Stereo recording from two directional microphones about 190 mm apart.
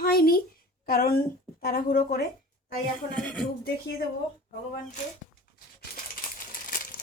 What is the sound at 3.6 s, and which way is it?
Speech, 55° left (ahead or behind).